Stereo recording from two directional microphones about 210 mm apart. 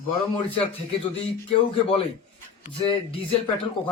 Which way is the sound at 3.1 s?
25° left (ahead or behind).